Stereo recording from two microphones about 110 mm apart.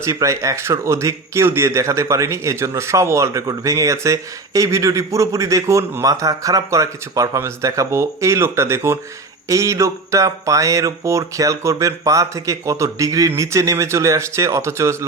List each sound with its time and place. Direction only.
0.0 s speech: 30° right (ahead or behind)